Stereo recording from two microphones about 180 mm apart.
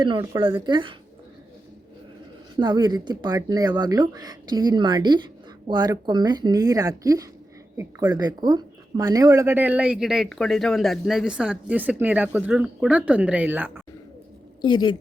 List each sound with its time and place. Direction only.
0.0 s speech: 25° right (ahead or behind)
2.6 s speech: 25° right (ahead or behind)
14.6 s a woman's voice: 25° left (ahead or behind)